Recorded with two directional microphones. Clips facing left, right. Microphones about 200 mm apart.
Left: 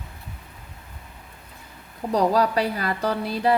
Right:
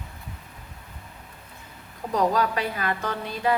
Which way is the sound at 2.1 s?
35° left (ahead or behind).